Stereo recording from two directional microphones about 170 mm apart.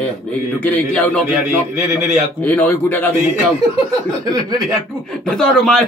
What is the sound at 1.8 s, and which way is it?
Speech, 15° right (ahead or behind).